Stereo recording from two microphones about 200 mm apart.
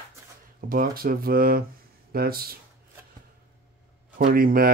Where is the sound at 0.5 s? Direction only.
45° right (ahead or behind).